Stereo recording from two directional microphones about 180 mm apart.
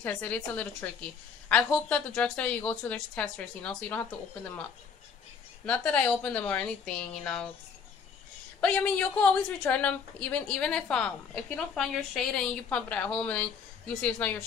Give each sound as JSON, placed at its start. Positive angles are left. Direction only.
{"t": 0.0, "sound": "a woman's voice", "side_deg": 10}
{"t": 5.7, "sound": "a woman's voice", "side_deg": 5}
{"t": 8.5, "sound": "a woman's voice", "side_deg": 5}